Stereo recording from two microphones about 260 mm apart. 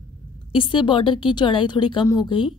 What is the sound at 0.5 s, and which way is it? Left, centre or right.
A woman's voice, centre.